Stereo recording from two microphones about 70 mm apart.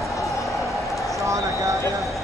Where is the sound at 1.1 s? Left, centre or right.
Right.